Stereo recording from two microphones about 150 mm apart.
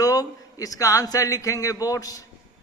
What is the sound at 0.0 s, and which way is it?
A man's voice, 25° left (ahead or behind).